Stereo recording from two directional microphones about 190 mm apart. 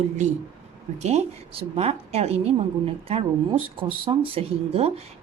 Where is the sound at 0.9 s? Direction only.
35° right (ahead or behind).